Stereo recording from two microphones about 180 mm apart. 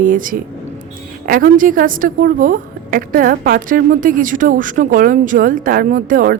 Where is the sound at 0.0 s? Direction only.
50° right (ahead or behind).